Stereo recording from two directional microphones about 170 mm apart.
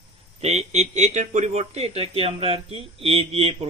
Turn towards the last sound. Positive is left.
turn(degrees=-35)  # may be behind; listen again after turning